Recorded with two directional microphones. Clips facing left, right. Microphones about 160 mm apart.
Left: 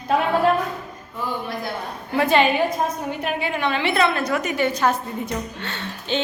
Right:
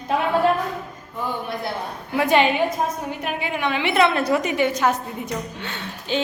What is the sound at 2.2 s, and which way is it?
A woman's voice, 15° right (ahead or behind).